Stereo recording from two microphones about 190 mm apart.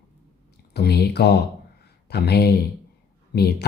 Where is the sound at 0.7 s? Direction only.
60° left (ahead or behind).